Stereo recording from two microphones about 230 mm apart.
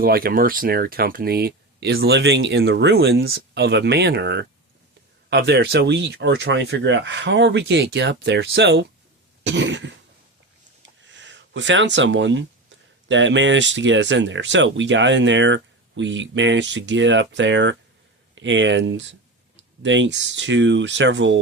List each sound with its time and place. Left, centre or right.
0.0 s speech: right
11.1 s speech: right